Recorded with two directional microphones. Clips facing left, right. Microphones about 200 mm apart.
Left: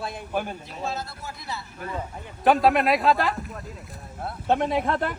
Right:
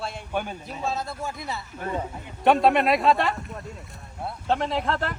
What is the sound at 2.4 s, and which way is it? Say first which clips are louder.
Speech: even; centre (ahead or behind).